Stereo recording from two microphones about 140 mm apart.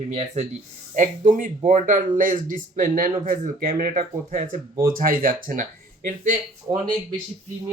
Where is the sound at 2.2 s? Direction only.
75° right (ahead or behind).